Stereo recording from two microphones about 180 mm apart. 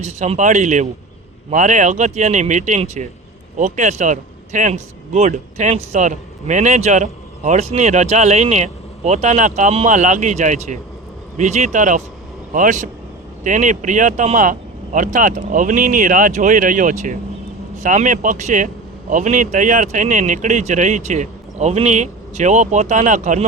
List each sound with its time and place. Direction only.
0.0 s a man's voice: 40° right (ahead or behind)